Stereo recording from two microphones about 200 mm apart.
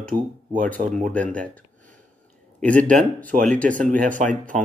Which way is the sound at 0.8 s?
40° right (ahead or behind).